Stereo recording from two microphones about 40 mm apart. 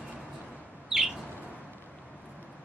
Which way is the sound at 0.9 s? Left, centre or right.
Centre.